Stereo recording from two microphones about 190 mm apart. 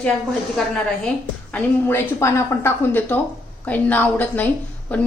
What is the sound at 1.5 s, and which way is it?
A woman's voice, 10° left (ahead or behind).